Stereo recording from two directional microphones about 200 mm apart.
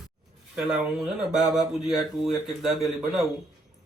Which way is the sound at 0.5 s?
5° right (ahead or behind).